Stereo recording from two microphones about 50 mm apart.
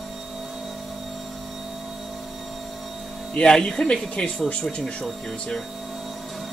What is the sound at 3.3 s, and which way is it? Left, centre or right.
Speech, centre.